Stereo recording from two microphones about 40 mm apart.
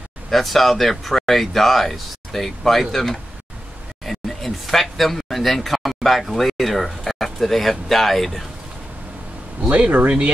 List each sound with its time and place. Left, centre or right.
0.3 s speech: centre
9.7 s speech: right